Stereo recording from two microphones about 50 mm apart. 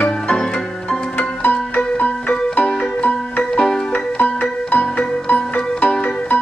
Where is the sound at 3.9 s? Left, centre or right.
Left.